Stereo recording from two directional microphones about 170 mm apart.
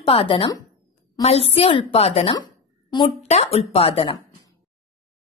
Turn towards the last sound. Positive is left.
turn(degrees=35)  # may be behind; listen again after turning